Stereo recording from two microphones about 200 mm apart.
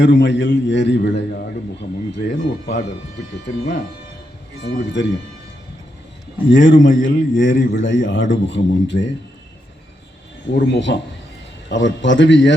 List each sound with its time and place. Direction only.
0.0 s a man's voice: 60° left (ahead or behind)
4.6 s a man's voice: 60° left (ahead or behind)
6.5 s a man's voice: 65° left (ahead or behind)
10.5 s a man's voice: 60° left (ahead or behind)